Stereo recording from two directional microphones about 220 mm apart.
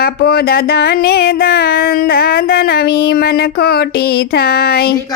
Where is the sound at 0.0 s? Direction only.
45° left (ahead or behind).